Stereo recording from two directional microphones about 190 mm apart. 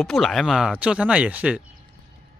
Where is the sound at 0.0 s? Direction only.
Centre (ahead or behind).